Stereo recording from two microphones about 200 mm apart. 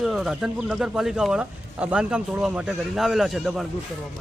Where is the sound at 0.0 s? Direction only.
Centre (ahead or behind).